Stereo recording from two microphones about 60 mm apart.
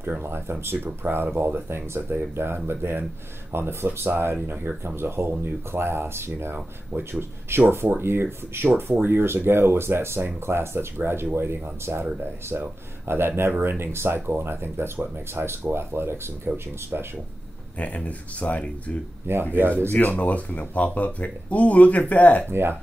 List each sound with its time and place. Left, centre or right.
0.0 s speech: right
16.5 s speech: right
17.7 s speech: left
19.3 s speech: right
19.9 s speech: left
22.5 s speech: right